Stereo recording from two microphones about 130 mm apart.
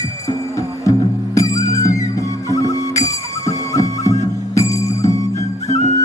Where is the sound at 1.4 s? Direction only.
25° left (ahead or behind).